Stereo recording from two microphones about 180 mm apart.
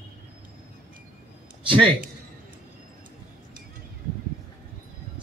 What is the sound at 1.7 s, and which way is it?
Speech, 30° right (ahead or behind).